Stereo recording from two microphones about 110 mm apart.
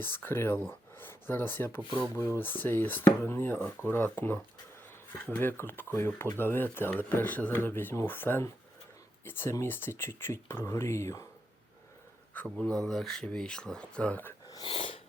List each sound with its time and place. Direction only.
0.0 s speech: 20° left (ahead or behind)
12.6 s speech: 5° left (ahead or behind)
14.6 s speech: 55° left (ahead or behind)